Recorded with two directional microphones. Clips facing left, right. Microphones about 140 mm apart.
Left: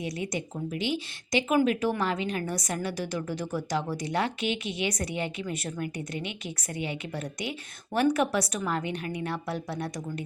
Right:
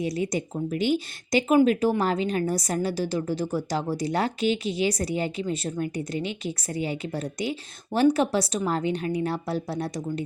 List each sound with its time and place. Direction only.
0.0 s a woman's voice: 35° right (ahead or behind)